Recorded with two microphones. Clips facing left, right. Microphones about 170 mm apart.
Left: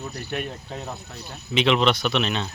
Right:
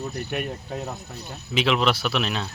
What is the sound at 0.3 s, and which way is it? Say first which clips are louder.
Speech: right 1 dB; 5° right (ahead or behind).